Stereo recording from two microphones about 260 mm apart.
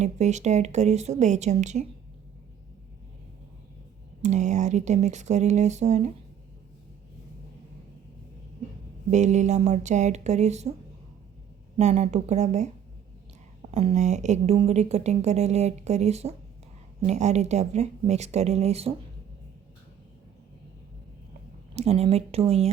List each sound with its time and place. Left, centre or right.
0.0 s a woman's voice: right
4.2 s a woman's voice: right
9.0 s a woman's voice: right
11.8 s a woman's voice: right
21.8 s a woman's voice: right